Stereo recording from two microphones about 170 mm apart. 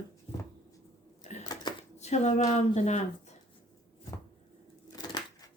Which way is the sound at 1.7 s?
25° left (ahead or behind).